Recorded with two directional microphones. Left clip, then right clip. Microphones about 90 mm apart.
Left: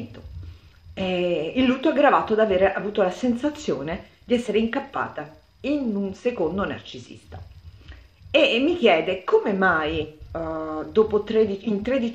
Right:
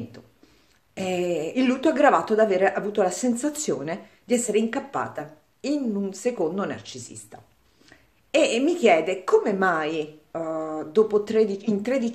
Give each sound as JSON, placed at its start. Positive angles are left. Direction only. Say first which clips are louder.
{"t": 0.9, "sound": "a woman's voice", "louder": "left 2 dB", "side_deg": -25}